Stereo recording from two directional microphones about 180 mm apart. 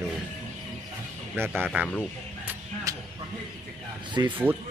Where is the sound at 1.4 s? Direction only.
10° right (ahead or behind).